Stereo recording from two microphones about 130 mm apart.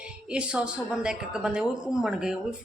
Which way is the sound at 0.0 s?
10° right (ahead or behind).